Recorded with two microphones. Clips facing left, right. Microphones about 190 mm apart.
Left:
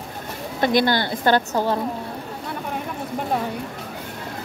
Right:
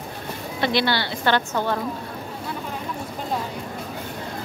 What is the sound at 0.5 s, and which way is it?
A woman's voice, 45° left (ahead or behind).